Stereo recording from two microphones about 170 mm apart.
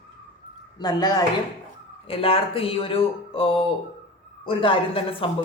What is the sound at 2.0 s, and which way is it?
Speech, 35° left (ahead or behind).